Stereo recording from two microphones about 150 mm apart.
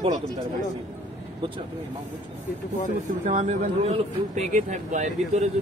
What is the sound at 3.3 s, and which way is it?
Speech, 50° right (ahead or behind).